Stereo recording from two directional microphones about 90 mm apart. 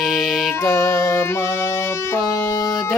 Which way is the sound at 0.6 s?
35° left (ahead or behind).